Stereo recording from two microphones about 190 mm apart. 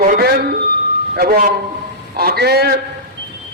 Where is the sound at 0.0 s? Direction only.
50° right (ahead or behind).